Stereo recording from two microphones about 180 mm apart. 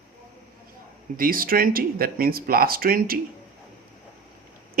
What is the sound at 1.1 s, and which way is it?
Speech, 50° right (ahead or behind).